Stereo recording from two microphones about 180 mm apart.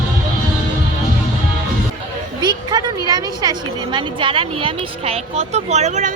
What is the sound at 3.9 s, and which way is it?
Speech, 30° right (ahead or behind).